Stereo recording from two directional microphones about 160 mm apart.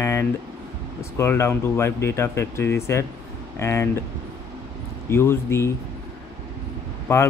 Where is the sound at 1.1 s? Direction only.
15° left (ahead or behind).